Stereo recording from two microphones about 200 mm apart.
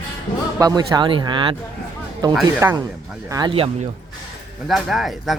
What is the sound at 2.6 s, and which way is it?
Speech, 15° right (ahead or behind).